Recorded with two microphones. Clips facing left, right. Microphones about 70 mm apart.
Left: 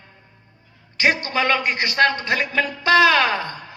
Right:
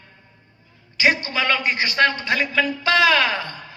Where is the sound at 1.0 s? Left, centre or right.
Left.